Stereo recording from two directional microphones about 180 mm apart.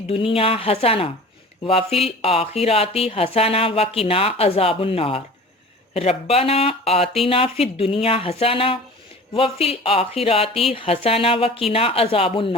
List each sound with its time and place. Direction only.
0.1 s speech: 30° left (ahead or behind)